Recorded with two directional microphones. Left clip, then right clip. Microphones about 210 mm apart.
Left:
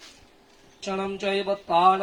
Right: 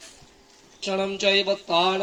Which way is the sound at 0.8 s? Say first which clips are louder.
Right 5 dB; 25° left (ahead or behind).